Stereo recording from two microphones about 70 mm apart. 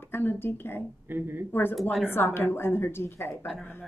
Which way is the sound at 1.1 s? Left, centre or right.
Right.